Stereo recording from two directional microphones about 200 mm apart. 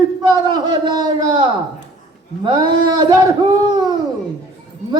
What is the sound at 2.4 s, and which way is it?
Speech, 20° right (ahead or behind).